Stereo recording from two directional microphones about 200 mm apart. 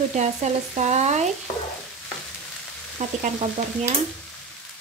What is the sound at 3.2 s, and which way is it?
Frying, 35° right (ahead or behind).